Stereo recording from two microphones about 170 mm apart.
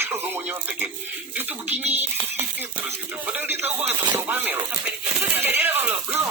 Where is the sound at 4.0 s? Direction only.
25° right (ahead or behind).